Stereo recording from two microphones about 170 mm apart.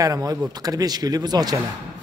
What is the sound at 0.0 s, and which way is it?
Speech, 20° right (ahead or behind).